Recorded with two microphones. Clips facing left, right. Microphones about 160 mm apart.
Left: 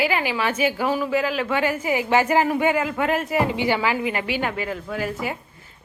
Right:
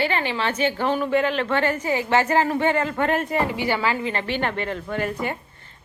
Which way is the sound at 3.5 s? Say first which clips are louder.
Left 1 dB; 15° left (ahead or behind).